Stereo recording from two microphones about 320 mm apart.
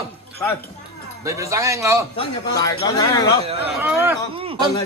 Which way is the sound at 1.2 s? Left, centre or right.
Centre.